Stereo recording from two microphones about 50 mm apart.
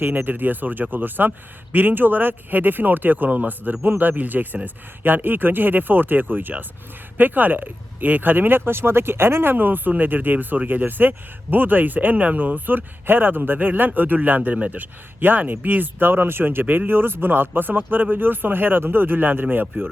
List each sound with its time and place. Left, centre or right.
0.0 s speech: right